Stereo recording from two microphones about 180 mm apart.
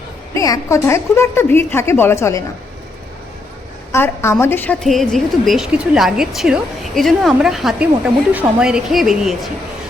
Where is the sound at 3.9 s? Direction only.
15° left (ahead or behind).